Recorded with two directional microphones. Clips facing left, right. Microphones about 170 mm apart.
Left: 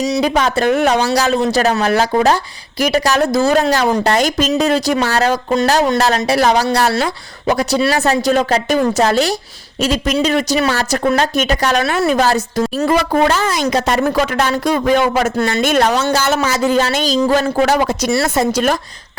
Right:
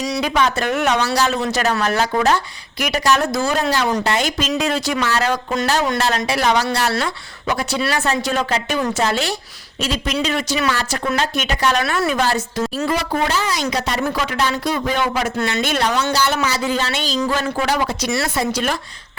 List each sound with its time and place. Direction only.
0.2 s a woman's voice: 40° left (ahead or behind)
11.8 s speech: 25° left (ahead or behind)
12.9 s a woman's voice: 55° left (ahead or behind)